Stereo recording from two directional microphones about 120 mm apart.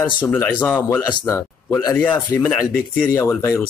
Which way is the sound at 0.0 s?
15° left (ahead or behind).